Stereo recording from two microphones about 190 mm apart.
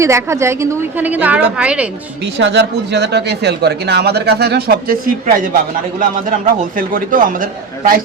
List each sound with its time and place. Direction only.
0.0 s a woman's voice: 15° right (ahead or behind)
2.4 s a man's voice: 65° right (ahead or behind); by 7.4 s 45° right (ahead or behind)